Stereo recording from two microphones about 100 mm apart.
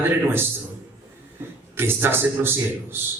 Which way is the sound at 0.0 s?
20° right (ahead or behind).